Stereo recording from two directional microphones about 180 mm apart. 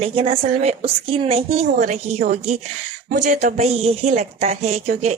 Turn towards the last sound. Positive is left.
turn(degrees=-35)  # may be behind; listen again after turning